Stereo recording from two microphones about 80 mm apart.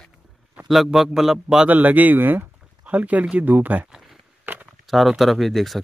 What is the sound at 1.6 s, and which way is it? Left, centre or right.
Speech, right.